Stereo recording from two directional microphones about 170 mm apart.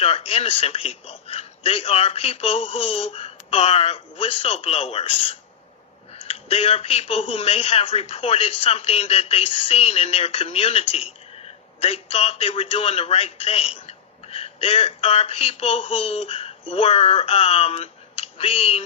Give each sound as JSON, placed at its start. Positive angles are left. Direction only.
{"t": 0.0, "sound": "speech", "side_deg": 35}